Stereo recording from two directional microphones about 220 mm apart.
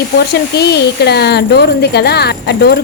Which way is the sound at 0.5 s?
50° left (ahead or behind).